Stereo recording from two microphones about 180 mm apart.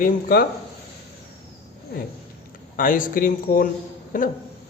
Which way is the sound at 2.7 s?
50° left (ahead or behind).